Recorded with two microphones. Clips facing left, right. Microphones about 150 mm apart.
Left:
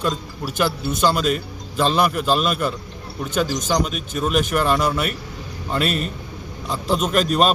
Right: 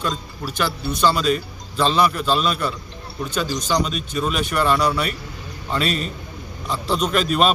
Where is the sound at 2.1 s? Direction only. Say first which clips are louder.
Left 1 dB; 10° left (ahead or behind).